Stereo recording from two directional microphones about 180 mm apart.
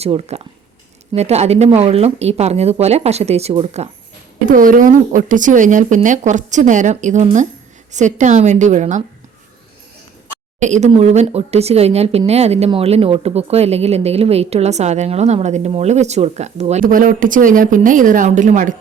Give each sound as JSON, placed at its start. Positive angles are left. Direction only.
{"t": 0.0, "sound": "speech", "side_deg": -35}
{"t": 4.4, "sound": "speech", "side_deg": -50}
{"t": 10.6, "sound": "speech", "side_deg": -40}